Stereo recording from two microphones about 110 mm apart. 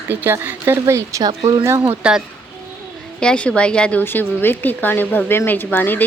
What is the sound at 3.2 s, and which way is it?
Speech, 10° left (ahead or behind).